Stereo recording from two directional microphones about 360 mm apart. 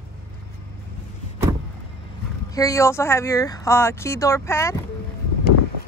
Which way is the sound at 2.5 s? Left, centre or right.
Centre.